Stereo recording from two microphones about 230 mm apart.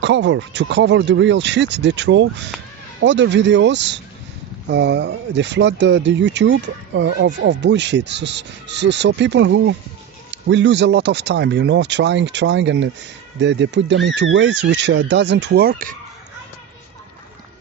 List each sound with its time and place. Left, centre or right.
0.0 s speech: right